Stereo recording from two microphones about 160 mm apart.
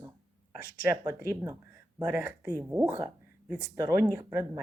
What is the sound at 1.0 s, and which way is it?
A woman's voice, 15° right (ahead or behind).